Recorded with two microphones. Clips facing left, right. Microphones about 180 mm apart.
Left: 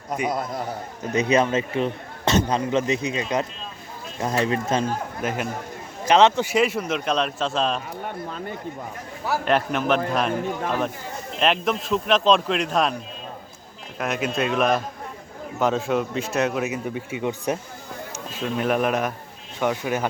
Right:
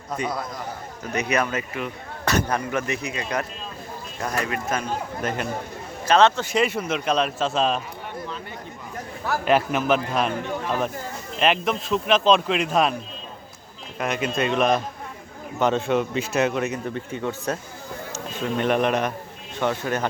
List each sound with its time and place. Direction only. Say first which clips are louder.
0.1 s speech: left 3 dB; 15° left (ahead or behind)
6.1 s a man's voice: left 1 dB; 15° left (ahead or behind); by 7.8 s centre (ahead or behind)
8.0 s a sound: left 3 dB; 45° left (ahead or behind)
9.2 s a man's voice: right 1 dB; centre (ahead or behind)
11.3 s a man's voice: even; centre (ahead or behind)
14.0 s a man's voice: even; centre (ahead or behind)
18.1 s speech: right 1 dB; 5° left (ahead or behind)